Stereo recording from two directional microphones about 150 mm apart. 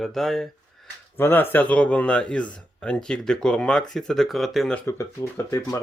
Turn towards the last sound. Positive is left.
turn(degrees=20)  # may be behind; listen again after turning